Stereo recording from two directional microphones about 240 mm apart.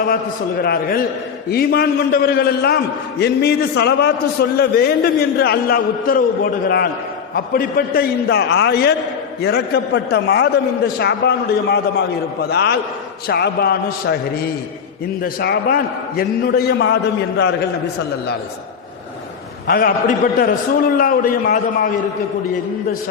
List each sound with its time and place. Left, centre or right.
0.6 s a man's voice: left
15.2 s a man's voice: left
19.6 s a man's voice: left